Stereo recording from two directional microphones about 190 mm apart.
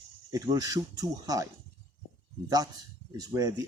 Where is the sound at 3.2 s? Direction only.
20° right (ahead or behind).